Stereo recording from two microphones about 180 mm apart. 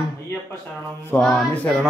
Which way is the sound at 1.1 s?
5° left (ahead or behind).